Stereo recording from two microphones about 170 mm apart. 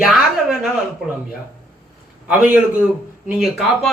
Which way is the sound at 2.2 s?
10° right (ahead or behind).